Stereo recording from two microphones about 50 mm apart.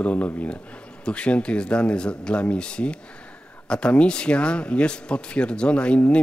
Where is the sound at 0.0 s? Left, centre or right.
Left.